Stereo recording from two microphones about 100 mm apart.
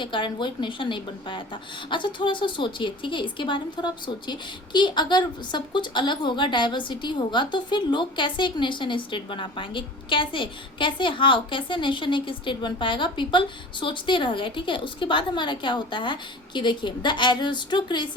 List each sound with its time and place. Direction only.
0.0 s a woman's voice: 55° left (ahead or behind)